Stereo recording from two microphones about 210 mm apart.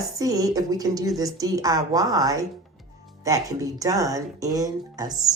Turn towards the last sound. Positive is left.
turn(degrees=-20)  # may be behind; listen again after turning